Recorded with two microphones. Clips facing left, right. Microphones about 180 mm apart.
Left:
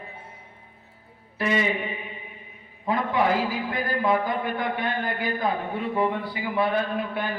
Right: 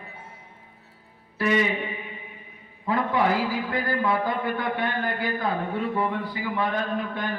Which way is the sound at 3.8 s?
15° left (ahead or behind).